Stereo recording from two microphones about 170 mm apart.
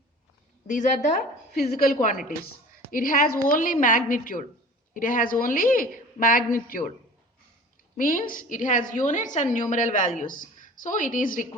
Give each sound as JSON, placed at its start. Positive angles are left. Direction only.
{"t": 0.7, "sound": "a woman's voice", "side_deg": 50}
{"t": 7.9, "sound": "a woman's voice", "side_deg": 55}